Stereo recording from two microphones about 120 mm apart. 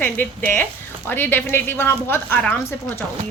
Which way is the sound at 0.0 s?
15° left (ahead or behind).